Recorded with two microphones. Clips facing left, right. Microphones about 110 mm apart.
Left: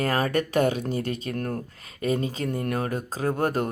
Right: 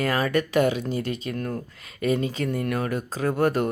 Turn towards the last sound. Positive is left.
turn(degrees=40)  # may be behind; listen again after turning